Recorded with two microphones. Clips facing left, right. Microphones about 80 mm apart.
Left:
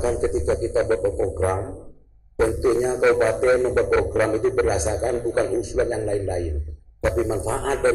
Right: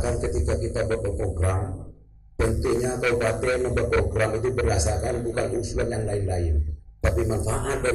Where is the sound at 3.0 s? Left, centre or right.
Left.